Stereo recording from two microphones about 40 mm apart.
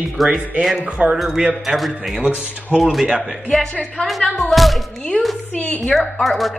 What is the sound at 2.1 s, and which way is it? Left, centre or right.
Speech, right.